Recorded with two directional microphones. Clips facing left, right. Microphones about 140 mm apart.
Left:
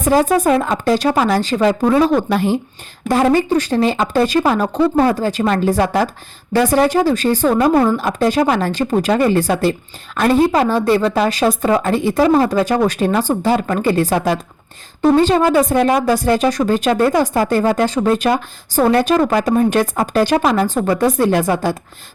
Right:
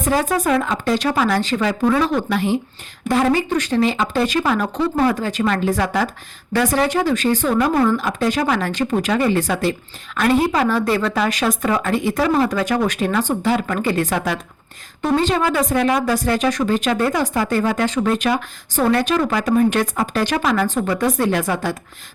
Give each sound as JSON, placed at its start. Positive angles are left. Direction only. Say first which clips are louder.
{"t": 0.0, "sound": "speech", "louder": "left 5 dB", "side_deg": 35}